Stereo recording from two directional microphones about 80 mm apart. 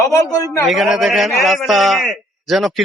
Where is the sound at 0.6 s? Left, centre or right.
Centre.